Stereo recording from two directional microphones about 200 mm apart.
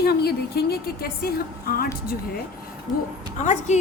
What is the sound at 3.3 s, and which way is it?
Speech, 35° left (ahead or behind).